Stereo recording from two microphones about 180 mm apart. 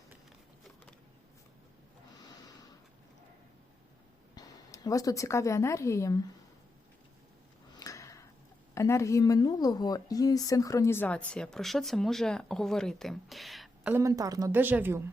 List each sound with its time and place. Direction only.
2.1 s snort: 20° left (ahead or behind)
4.4 s a woman's voice: 20° left (ahead or behind)
7.8 s a sound: 15° left (ahead or behind)
8.7 s a woman's voice: 15° left (ahead or behind); by 13.9 s centre (ahead or behind)
13.9 s speech: 15° right (ahead or behind)